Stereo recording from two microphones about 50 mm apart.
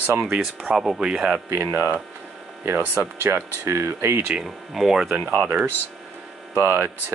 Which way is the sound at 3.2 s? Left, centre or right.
Right.